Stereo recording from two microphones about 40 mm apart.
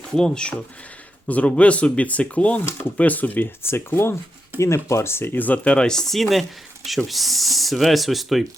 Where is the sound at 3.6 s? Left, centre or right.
Left.